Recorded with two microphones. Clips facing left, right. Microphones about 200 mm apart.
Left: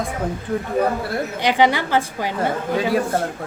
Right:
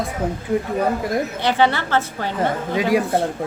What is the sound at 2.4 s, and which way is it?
Speech, 15° right (ahead or behind).